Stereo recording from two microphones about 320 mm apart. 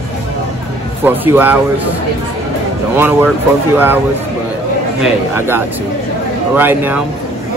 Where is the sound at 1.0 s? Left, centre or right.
Centre.